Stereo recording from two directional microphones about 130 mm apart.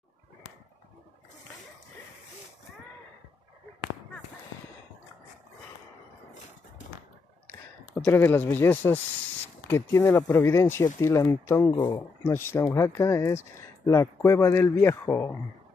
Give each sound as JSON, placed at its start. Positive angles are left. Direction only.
{"t": 7.4, "sound": "speech", "side_deg": 15}
{"t": 12.3, "sound": "speech", "side_deg": 20}